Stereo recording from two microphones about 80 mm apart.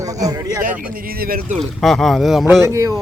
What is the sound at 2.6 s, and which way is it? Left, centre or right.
Speech, right.